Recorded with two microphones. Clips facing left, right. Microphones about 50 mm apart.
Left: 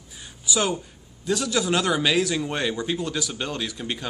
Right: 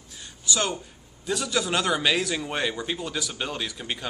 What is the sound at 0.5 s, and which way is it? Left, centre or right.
Speech, centre.